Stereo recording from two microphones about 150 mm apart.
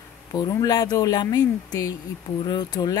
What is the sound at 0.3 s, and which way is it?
Speech, 25° left (ahead or behind).